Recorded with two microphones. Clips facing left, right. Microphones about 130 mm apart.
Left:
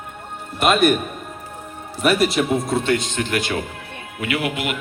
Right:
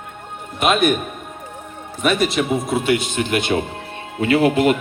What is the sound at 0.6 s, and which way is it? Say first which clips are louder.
Speech: left 1 dB; centre (ahead or behind).